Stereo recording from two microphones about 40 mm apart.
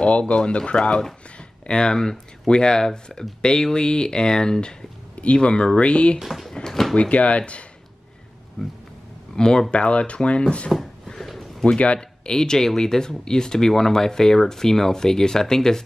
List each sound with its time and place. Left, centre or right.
0.0 s speech: left
6.1 s speech: centre
6.5 s drawer open or close: centre
7.0 s speech: left
9.3 s speech: centre
12.3 s speech: centre